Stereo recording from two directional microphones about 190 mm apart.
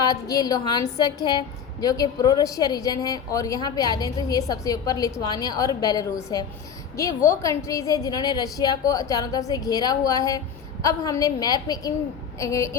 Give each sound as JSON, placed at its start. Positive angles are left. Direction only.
{"t": 0.0, "sound": "a woman's voice", "side_deg": 20}